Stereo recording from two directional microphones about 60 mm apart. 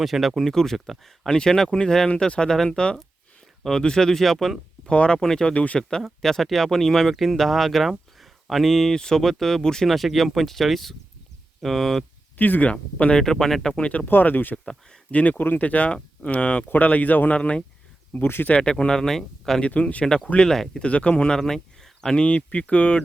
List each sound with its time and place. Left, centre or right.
0.0 s speech: centre
4.9 s speech: centre
6.0 s speech: centre
12.4 s speech: left
12.7 s speech: centre
14.1 s speech: left
14.5 s speech: centre
15.1 s speech: left
18.1 s speech: left
18.4 s speech: centre
19.6 s speech: left
20.5 s speech: centre
20.8 s speech: centre